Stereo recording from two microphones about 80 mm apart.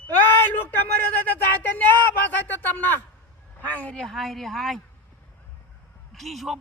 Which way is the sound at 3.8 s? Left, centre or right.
Centre.